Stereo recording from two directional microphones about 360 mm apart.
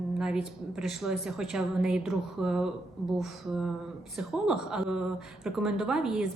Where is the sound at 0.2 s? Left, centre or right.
Centre.